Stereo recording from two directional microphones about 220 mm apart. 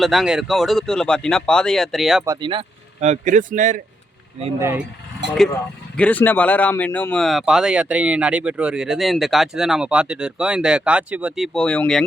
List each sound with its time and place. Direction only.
0.0 s speech: centre (ahead or behind)
2.2 s speech: 20° right (ahead or behind); by 3.8 s 35° right (ahead or behind)
4.6 s speech: 10° right (ahead or behind)
6.0 s speech: 5° left (ahead or behind)